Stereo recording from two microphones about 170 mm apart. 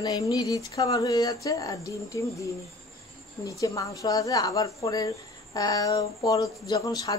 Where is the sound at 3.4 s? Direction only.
20° left (ahead or behind).